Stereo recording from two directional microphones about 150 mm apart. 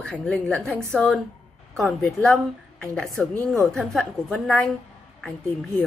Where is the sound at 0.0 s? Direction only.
5° left (ahead or behind).